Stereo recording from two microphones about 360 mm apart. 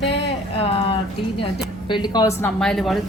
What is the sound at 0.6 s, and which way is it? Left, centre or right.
Speech, centre.